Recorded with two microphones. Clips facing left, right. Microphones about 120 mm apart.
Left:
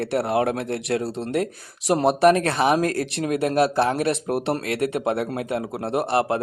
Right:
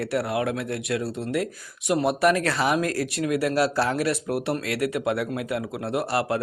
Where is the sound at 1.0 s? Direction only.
75° left (ahead or behind).